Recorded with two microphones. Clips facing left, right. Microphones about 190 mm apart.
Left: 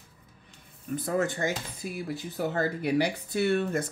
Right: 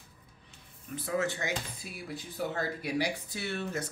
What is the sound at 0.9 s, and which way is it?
Speech, 50° left (ahead or behind).